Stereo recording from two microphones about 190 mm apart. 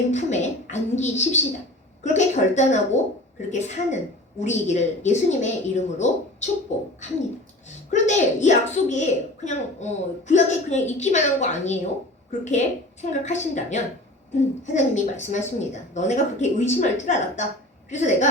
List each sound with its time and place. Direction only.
0.1 s a child's voice: 40° left (ahead or behind)
7.9 s a child's voice: 40° left (ahead or behind)